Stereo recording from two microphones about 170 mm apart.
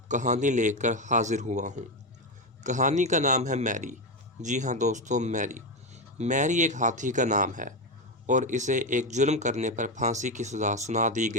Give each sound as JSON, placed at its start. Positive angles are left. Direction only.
{"t": 0.1, "sound": "speech", "side_deg": -45}